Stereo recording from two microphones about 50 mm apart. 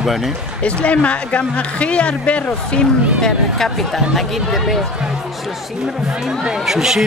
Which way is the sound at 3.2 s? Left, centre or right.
Centre.